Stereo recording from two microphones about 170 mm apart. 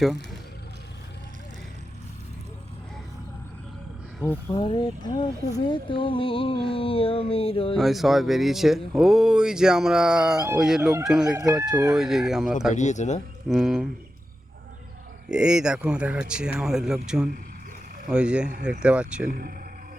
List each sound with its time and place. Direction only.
0.0 s speech: centre (ahead or behind)
4.3 s speech: 15° left (ahead or behind)
4.6 s speech: 25° left (ahead or behind)
7.8 s speech: centre (ahead or behind)
11.7 s speech: 20° right (ahead or behind)
11.9 s speech: centre (ahead or behind)
12.7 s speech: 45° left (ahead or behind)
13.5 s speech: centre (ahead or behind)
15.3 s speech: 5° right (ahead or behind)
19.3 s speech: 60° right (ahead or behind)